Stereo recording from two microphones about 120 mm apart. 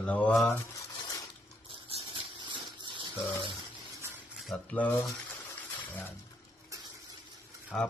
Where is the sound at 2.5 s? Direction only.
40° right (ahead or behind).